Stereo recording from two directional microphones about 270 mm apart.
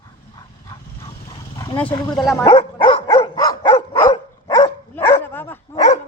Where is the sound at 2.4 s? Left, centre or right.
Centre.